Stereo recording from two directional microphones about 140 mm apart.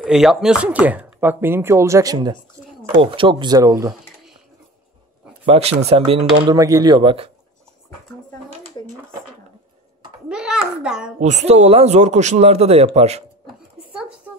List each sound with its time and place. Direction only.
0.0 s speech: 5° right (ahead or behind); by 3.9 s 25° right (ahead or behind)
5.5 s speech: 50° right (ahead or behind)
6.4 s speech: 25° right (ahead or behind)
10.2 s a sound: 5° right (ahead or behind)
11.1 s speech: 55° right (ahead or behind)